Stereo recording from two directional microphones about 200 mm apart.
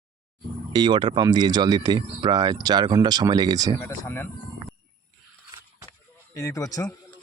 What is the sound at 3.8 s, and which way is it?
Speech, 10° left (ahead or behind).